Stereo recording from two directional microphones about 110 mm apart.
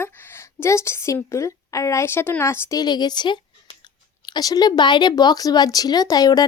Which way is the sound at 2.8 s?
40° left (ahead or behind).